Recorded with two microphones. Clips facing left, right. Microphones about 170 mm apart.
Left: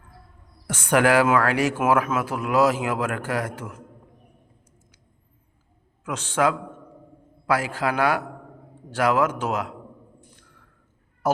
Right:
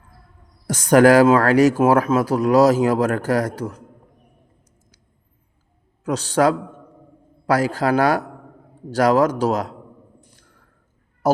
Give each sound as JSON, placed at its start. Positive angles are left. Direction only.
{"t": 0.7, "sound": "speech", "side_deg": -40}
{"t": 6.1, "sound": "speech", "side_deg": -35}